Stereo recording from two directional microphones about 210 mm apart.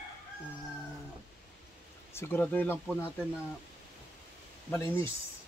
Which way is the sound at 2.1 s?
10° left (ahead or behind).